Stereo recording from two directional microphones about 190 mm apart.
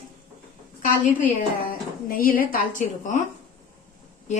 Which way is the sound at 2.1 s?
50° left (ahead or behind).